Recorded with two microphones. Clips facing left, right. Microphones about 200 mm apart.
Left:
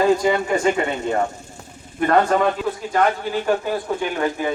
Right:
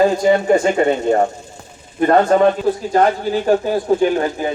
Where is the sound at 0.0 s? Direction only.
45° right (ahead or behind).